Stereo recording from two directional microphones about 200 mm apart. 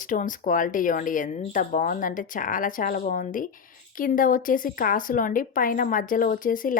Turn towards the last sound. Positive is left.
turn(degrees=45)  # may be behind; listen again after turning